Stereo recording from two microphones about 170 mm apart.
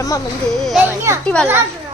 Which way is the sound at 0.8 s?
15° right (ahead or behind).